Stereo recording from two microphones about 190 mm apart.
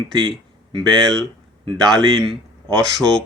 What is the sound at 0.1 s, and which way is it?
Speech, 25° right (ahead or behind).